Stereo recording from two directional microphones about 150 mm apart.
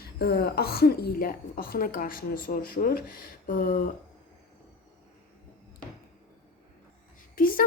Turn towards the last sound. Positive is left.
turn(degrees=70)  # may be behind; listen again after turning